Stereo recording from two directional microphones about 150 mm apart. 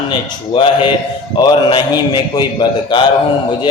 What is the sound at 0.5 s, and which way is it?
A man's voice, 35° left (ahead or behind).